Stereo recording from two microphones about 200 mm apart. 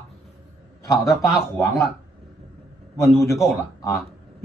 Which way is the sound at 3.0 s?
15° left (ahead or behind).